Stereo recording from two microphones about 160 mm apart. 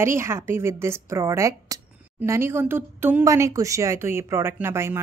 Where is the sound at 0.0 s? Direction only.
15° right (ahead or behind).